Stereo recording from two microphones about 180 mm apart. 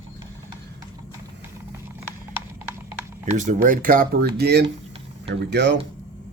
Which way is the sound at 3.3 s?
45° right (ahead or behind).